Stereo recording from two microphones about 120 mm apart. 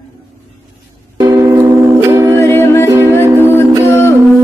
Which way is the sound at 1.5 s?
15° right (ahead or behind).